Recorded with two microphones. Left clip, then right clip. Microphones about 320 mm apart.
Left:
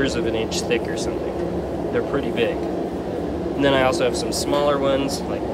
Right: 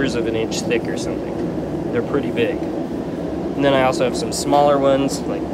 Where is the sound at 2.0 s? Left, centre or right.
Centre.